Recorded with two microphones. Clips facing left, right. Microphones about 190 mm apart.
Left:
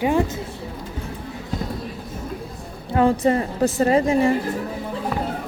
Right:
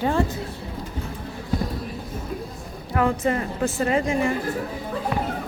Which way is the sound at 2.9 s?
30° left (ahead or behind).